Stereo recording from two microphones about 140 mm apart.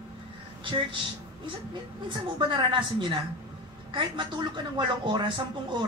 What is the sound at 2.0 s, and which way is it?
Speech, 35° right (ahead or behind).